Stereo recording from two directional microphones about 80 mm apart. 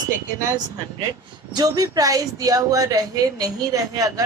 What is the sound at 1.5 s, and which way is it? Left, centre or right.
Speech, right.